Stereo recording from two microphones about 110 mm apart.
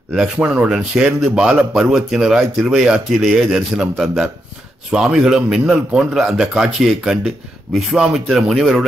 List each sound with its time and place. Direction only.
0.4 s a man's voice: 15° right (ahead or behind); by 8.8 s centre (ahead or behind)